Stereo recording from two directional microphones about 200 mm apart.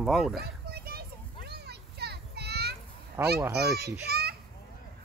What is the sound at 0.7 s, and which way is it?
Children playing, 50° right (ahead or behind).